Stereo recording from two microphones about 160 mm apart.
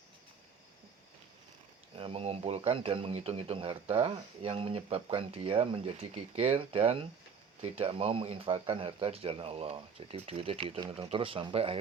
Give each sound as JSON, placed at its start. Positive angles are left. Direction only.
{"t": 2.0, "sound": "speech", "side_deg": -35}